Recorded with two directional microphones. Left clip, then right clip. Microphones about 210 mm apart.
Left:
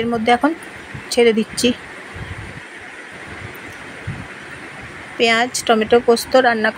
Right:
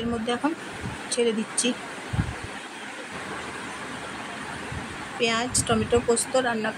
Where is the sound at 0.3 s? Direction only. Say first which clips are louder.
Left 14 dB; 20° left (ahead or behind).